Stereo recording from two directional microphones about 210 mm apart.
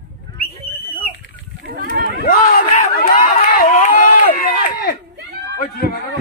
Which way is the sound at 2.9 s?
45° left (ahead or behind).